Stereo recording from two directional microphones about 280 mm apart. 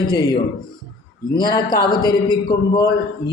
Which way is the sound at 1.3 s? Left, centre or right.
Centre.